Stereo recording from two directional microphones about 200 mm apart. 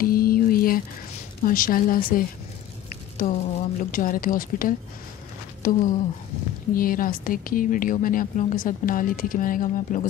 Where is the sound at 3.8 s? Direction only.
45° left (ahead or behind).